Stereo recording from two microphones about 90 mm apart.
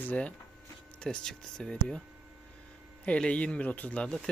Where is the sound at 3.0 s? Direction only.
10° left (ahead or behind).